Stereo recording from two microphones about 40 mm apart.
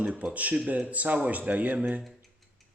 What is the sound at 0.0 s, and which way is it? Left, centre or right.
Speech, right.